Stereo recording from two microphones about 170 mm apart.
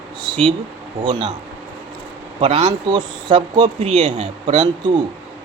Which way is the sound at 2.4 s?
40° right (ahead or behind).